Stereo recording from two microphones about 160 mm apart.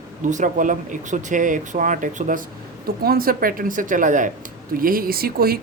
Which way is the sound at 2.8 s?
65° right (ahead or behind).